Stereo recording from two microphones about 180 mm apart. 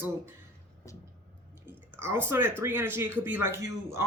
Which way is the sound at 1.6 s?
10° right (ahead or behind).